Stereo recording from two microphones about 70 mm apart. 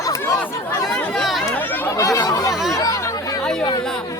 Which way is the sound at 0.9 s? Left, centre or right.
Centre.